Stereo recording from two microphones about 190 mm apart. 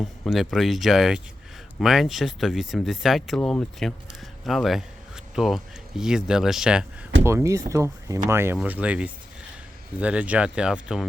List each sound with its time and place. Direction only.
0.0 s speech: centre (ahead or behind)
7.3 s speech: 15° right (ahead or behind)